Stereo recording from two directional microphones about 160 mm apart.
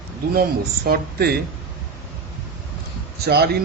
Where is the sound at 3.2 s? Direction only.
90° right.